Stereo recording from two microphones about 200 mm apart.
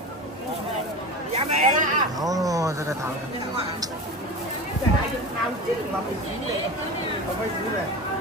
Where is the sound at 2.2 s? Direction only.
15° right (ahead or behind).